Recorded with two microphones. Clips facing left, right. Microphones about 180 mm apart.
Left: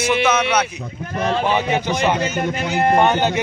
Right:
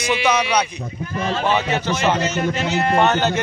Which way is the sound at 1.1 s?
60° left (ahead or behind).